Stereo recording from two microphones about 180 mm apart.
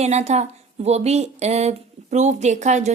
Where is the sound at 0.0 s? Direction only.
35° right (ahead or behind).